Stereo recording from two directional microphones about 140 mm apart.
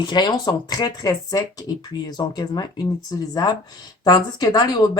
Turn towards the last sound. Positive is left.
turn(degrees=30)  # may be behind; listen again after turning